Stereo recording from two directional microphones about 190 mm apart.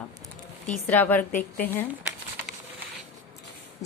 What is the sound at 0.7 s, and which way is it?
Speech, 10° left (ahead or behind).